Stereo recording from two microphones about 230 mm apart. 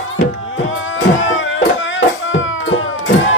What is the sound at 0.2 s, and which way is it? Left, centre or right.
Music, left.